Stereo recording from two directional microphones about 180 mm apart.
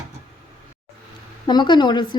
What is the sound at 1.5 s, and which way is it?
Speech, 25° left (ahead or behind).